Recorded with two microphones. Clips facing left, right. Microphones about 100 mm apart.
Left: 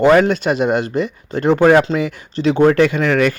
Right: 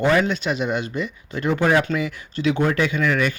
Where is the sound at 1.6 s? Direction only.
55° left (ahead or behind).